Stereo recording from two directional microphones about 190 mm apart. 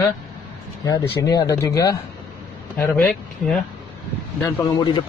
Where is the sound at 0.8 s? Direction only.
20° left (ahead or behind).